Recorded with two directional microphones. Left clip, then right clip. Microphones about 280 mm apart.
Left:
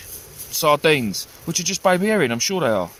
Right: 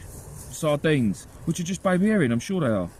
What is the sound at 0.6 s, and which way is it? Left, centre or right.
Speech, centre.